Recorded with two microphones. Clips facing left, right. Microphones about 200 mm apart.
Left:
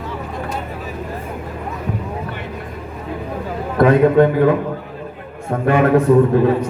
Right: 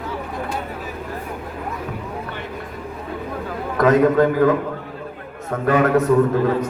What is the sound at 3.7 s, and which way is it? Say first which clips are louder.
Speech: left 3 dB; 30° left (ahead or behind).